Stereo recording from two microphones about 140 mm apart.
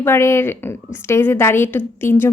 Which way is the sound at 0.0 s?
20° left (ahead or behind).